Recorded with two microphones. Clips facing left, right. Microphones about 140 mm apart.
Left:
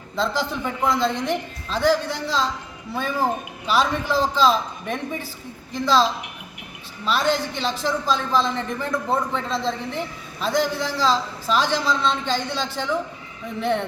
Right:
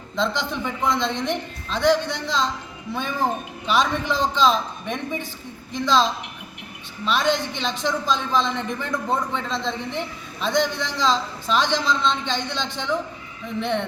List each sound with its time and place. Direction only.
0.2 s a woman's voice: 5° left (ahead or behind)